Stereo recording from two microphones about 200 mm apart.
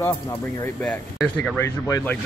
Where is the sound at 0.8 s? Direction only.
5° left (ahead or behind).